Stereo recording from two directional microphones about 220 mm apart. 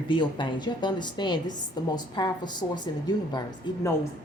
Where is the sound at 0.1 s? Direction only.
20° left (ahead or behind).